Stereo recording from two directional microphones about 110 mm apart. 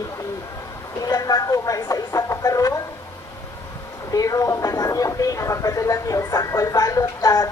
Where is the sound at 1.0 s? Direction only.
35° left (ahead or behind).